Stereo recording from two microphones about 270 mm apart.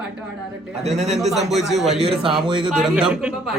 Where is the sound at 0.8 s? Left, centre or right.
Right.